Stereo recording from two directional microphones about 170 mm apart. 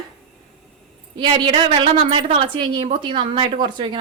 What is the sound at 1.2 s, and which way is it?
A woman's voice, 30° right (ahead or behind).